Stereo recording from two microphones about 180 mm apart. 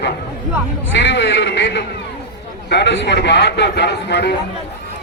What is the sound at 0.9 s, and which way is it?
A man's voice, 85° left.